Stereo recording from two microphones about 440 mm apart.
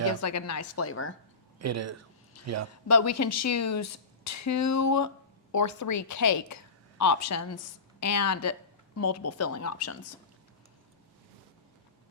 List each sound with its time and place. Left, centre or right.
0.1 s speech: left
1.5 s speech: right
2.3 s a sound: left
2.8 s speech: left